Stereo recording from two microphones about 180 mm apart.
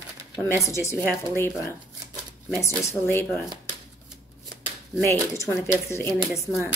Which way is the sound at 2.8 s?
15° left (ahead or behind).